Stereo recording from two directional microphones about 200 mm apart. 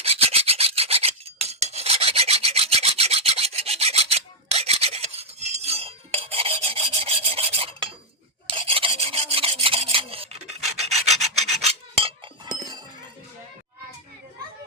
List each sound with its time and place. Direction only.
0.0 s filing: 30° right (ahead or behind)
12.5 s chink: 20° right (ahead or behind)